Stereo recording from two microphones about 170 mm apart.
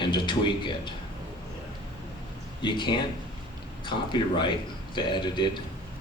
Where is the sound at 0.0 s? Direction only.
25° left (ahead or behind).